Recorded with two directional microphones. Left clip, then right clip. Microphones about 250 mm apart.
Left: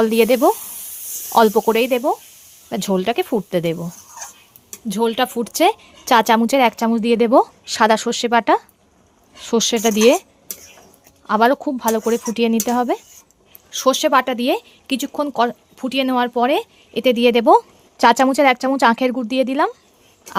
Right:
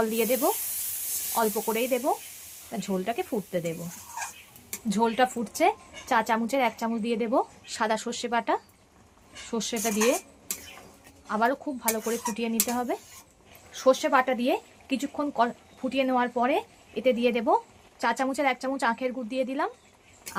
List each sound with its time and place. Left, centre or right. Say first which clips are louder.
0.0 s speech: left 11 dB; left
4.9 s speech: left 5 dB; left
11.3 s speech: left 11 dB; left